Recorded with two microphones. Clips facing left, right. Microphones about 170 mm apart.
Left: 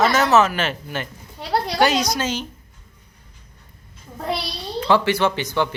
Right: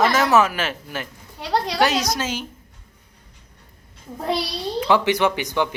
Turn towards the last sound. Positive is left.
turn(degrees=-15)  # may be behind; listen again after turning